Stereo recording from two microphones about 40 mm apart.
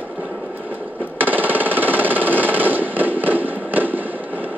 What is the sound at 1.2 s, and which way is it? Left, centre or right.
Music, right.